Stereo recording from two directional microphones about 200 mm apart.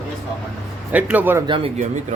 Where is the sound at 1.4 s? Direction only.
25° right (ahead or behind).